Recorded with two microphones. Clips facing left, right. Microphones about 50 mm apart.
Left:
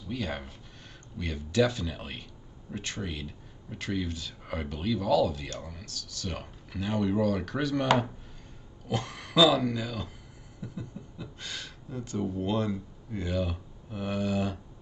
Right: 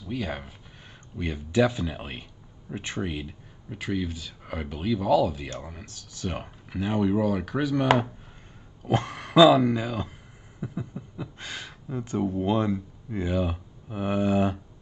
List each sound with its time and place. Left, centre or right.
0.0 s speech: centre
1.1 s speech: centre
8.8 s speech: right